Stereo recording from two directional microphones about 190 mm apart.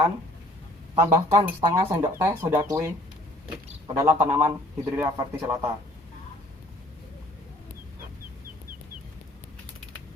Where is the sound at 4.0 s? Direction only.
15° right (ahead or behind).